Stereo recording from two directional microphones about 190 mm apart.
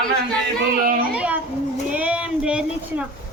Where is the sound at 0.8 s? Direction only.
45° right (ahead or behind).